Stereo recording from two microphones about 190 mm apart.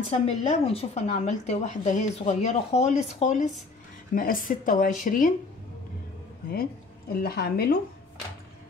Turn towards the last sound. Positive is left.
turn(degrees=55)  # may be behind; listen again after turning